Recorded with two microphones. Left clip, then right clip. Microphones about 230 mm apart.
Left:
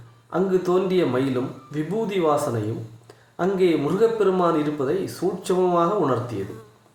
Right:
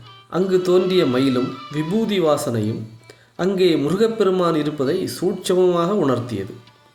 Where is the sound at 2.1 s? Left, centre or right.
Right.